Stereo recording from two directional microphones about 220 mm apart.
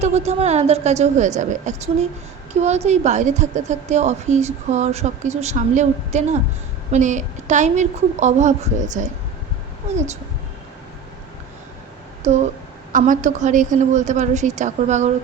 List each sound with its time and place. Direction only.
0.0 s a woman's voice: 30° right (ahead or behind)
12.3 s a woman's voice: 30° right (ahead or behind)